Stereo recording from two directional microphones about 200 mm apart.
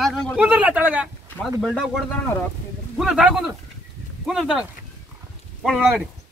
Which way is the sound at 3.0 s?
5° right (ahead or behind).